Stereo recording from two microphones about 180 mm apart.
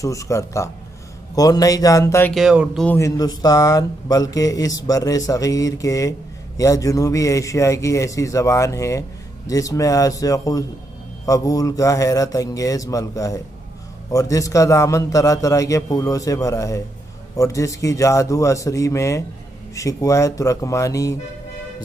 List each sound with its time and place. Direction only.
0.0 s speech: 15° left (ahead or behind)
2.3 s speech: 5° right (ahead or behind)
2.9 s speech: 20° left (ahead or behind)